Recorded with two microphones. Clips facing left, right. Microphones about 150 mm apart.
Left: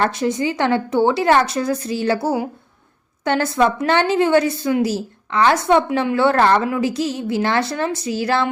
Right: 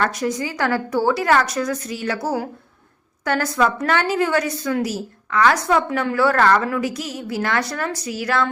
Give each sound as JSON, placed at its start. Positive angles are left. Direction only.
{"t": 0.0, "sound": "a woman's voice", "side_deg": 25}